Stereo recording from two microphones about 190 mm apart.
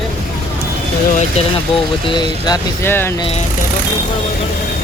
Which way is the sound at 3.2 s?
30° left (ahead or behind).